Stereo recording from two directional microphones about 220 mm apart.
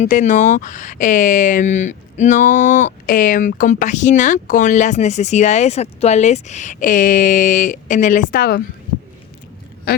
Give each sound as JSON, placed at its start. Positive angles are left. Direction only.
{"t": 0.0, "sound": "speech", "side_deg": 35}